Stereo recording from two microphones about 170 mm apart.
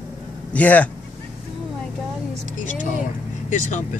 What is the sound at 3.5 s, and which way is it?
Speech, 45° left (ahead or behind).